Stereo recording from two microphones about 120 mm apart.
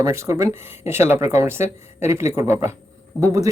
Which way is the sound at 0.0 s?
25° right (ahead or behind).